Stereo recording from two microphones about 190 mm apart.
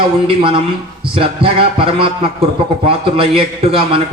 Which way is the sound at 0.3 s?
25° right (ahead or behind).